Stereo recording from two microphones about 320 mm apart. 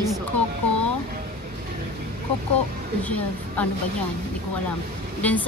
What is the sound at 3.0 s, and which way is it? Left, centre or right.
Speech, centre.